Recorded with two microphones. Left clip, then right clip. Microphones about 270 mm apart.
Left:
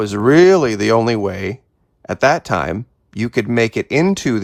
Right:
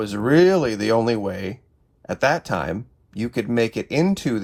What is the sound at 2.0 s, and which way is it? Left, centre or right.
Speech, left.